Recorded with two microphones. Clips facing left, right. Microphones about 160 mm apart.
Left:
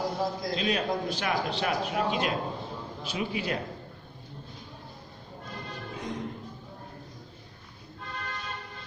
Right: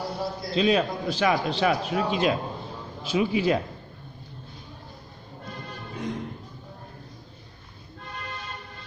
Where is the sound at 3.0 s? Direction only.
90° right.